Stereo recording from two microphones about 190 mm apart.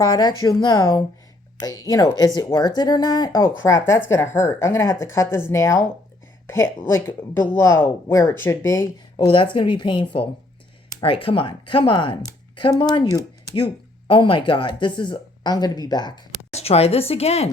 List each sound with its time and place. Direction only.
0.0 s speech: 20° left (ahead or behind)
9.3 s speech: 25° left (ahead or behind)
16.5 s a woman's voice: 35° left (ahead or behind)